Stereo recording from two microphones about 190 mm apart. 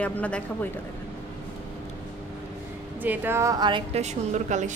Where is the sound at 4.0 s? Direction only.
40° right (ahead or behind).